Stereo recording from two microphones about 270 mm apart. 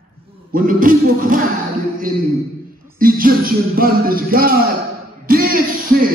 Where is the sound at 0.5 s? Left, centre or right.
Right.